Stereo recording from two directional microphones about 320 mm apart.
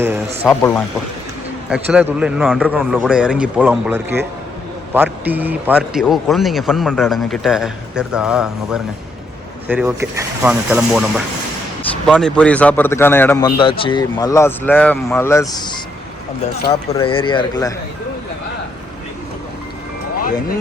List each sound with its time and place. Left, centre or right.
0.4 s a man's voice: centre